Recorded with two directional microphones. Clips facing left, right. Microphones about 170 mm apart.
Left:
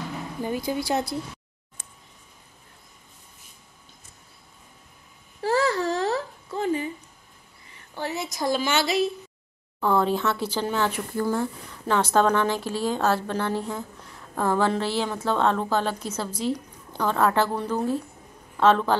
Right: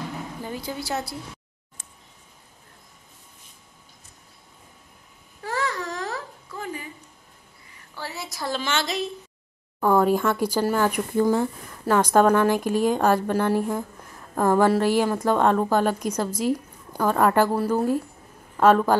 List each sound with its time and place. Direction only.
0.4 s a woman's voice: 15° left (ahead or behind)
5.4 s babbling: 30° left (ahead or behind)
7.9 s a woman's voice: 20° left (ahead or behind)
9.8 s a woman's voice: 10° right (ahead or behind)